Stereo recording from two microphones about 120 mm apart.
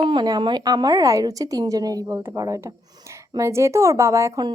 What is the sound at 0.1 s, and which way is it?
A woman's voice, 40° right (ahead or behind).